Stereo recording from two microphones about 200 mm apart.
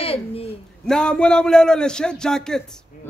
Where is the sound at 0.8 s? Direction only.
5° left (ahead or behind).